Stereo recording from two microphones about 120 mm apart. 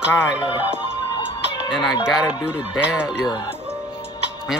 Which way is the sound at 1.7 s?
5° right (ahead or behind).